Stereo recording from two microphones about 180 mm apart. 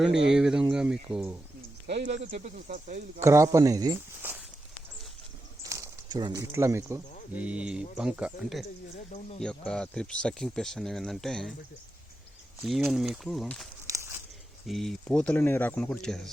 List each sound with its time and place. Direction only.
0.1 s speech: 75° right (ahead or behind)
0.3 s speech: 5° right (ahead or behind)
2.0 s speech: 40° right (ahead or behind)
3.2 s speech: 15° right (ahead or behind)
5.6 s speech: 15° right (ahead or behind); by 11.5 s 5° left (ahead or behind)
12.6 s speech: centre (ahead or behind)
13.8 s walk: 15° right (ahead or behind)
14.7 s speech: centre (ahead or behind)